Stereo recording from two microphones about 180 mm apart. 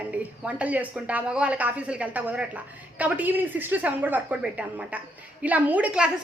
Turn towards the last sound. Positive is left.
turn(degrees=-5)  # may be behind; listen again after turning